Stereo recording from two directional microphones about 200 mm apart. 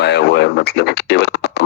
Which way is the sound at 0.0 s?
60° left (ahead or behind).